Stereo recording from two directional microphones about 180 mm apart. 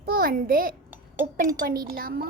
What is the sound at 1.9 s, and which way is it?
Speech, 55° right (ahead or behind).